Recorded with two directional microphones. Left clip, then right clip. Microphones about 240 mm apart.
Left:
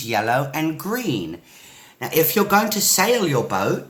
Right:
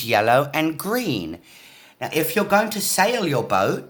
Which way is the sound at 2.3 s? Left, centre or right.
Right.